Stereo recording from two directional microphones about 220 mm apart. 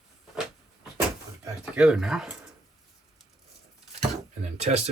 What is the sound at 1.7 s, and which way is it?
Speech, 5° right (ahead or behind).